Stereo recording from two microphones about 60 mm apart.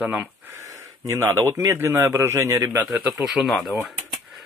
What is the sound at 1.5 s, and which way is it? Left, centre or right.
A man's voice, right.